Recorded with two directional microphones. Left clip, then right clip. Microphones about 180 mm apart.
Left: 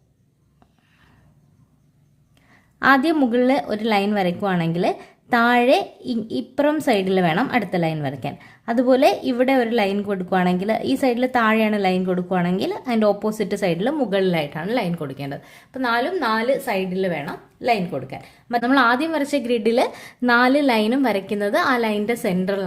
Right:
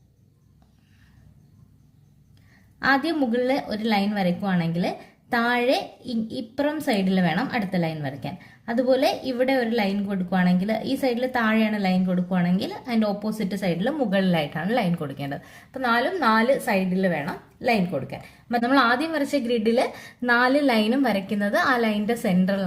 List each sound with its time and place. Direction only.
2.7 s a woman's voice: 35° left (ahead or behind)